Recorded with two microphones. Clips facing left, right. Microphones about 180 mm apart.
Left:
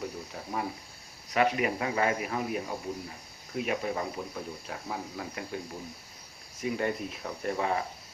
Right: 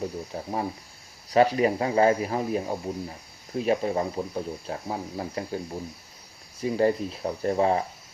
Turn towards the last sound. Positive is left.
turn(degrees=-30)  # may be behind; listen again after turning